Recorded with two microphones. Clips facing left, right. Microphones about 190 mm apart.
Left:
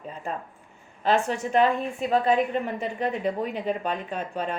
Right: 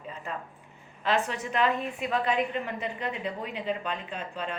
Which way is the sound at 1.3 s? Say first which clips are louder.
Left 5 dB; 45° left (ahead or behind).